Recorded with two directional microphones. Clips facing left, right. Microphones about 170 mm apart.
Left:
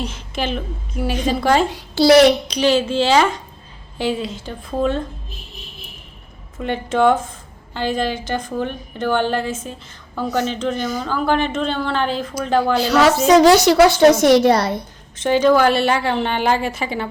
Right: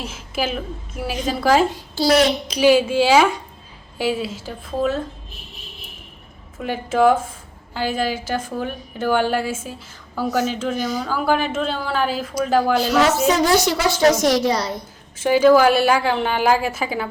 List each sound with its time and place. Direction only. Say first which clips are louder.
0.0 s a woman's voice: left 1 dB; 5° right (ahead or behind)
1.7 s a child's voice: left 6 dB; 70° left (ahead or behind)
2.5 s a woman's voice: right 2 dB; 10° right (ahead or behind)
6.6 s a woman's voice: even; 5° right (ahead or behind)
13.2 s a woman's voice: left 6 dB; 85° left; by 14.8 s 60° left (ahead or behind)
15.1 s a woman's voice: right 1 dB; 5° right (ahead or behind)